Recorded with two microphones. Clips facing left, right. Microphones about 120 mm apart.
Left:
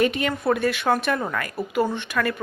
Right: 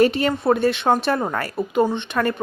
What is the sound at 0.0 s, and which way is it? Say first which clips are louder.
A woman's voice: right 4 dB; 35° right (ahead or behind).